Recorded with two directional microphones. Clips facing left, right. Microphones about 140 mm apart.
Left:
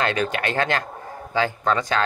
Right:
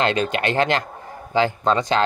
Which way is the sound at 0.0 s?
25° right (ahead or behind).